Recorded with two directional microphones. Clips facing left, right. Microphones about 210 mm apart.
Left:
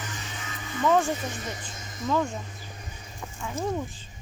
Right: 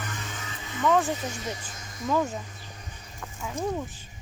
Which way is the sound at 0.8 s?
5° left (ahead or behind).